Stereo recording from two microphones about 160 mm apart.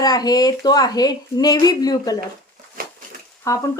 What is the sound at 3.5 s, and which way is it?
Speech, 20° left (ahead or behind).